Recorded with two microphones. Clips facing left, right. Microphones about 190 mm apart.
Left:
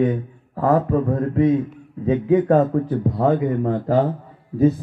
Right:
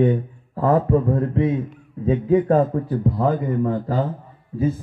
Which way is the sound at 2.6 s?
75° left (ahead or behind).